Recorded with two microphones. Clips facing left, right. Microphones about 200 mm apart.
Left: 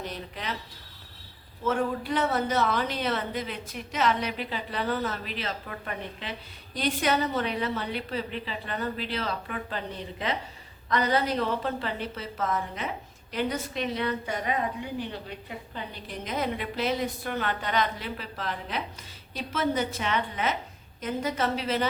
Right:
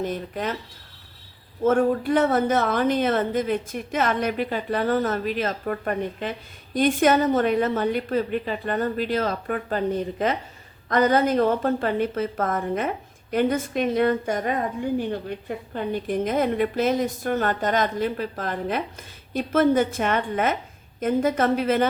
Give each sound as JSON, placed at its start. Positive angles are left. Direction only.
{"t": 0.0, "sound": "a woman's voice", "side_deg": -50}
{"t": 1.6, "sound": "a woman's voice", "side_deg": -50}